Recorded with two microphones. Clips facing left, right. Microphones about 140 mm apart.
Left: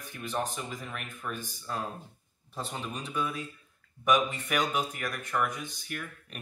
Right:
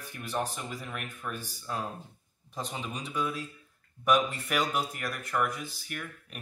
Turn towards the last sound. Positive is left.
turn(degrees=-5)  # may be behind; listen again after turning